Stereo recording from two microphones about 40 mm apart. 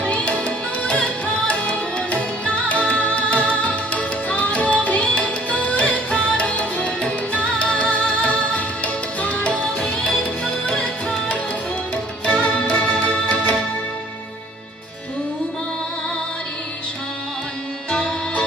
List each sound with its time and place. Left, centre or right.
0.0 s music: left
9.7 s music: centre
12.3 s music: left